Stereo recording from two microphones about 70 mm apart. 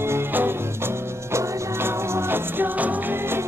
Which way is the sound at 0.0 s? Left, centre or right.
Right.